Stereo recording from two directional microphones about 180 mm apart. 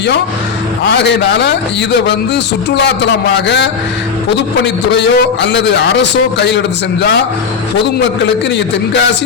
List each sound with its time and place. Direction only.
0.9 s a man's voice: 70° left (ahead or behind)
8.4 s a man's voice: 75° left (ahead or behind)